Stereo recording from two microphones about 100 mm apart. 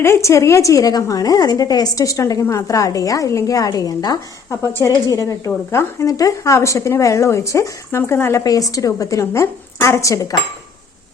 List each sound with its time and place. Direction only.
0.0 s a woman's voice: 30° left (ahead or behind)
8.4 s a woman's voice: 35° left (ahead or behind)